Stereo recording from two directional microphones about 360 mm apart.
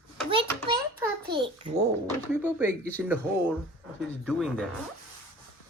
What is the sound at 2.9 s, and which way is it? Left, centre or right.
Speech, centre.